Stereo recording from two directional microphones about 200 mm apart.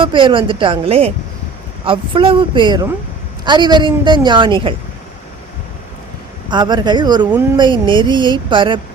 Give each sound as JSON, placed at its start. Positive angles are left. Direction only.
{"t": 0.0, "sound": "a woman's voice", "side_deg": -25}
{"t": 6.5, "sound": "a woman's voice", "side_deg": -20}